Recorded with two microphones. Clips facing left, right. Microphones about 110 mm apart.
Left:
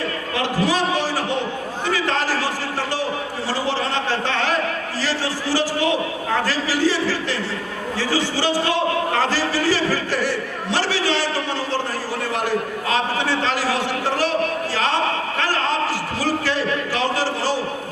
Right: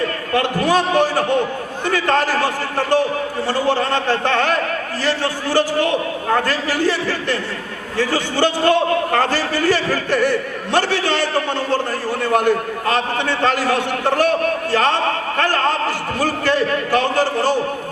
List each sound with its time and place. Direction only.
0.3 s a man's voice: 55° right (ahead or behind)
15.4 s a sound: 50° right (ahead or behind)
16.2 s a man's voice: 55° right (ahead or behind)